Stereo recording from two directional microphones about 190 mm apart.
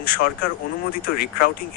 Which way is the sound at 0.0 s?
55° left (ahead or behind).